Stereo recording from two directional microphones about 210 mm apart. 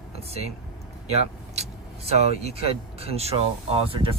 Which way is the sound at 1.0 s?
30° right (ahead or behind).